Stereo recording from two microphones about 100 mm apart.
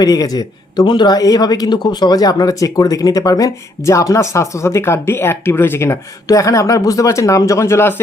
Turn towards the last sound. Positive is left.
turn(degrees=25)  # may be behind; listen again after turning